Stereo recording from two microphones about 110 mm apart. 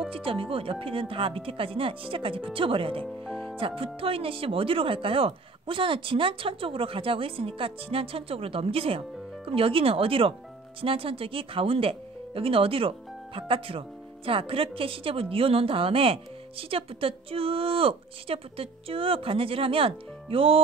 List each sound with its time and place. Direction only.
0.1 s speech: 55° right (ahead or behind)